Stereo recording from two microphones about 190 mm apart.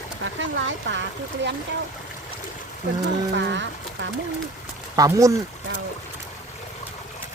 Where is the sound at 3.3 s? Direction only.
70° right (ahead or behind).